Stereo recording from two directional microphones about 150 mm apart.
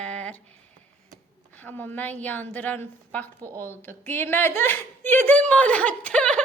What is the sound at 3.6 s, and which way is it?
Speech, 15° left (ahead or behind).